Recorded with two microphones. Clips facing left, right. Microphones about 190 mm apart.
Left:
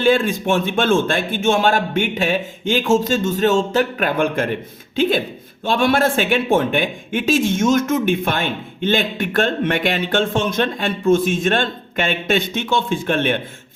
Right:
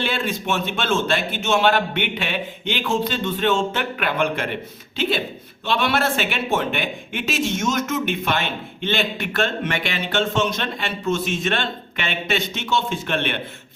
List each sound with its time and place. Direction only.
0.0 s a man's voice: 50° left (ahead or behind)